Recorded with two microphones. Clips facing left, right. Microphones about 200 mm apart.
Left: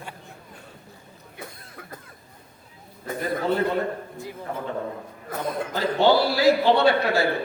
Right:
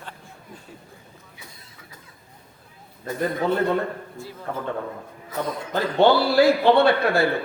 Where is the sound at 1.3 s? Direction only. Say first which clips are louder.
Left 7 dB; 55° left (ahead or behind).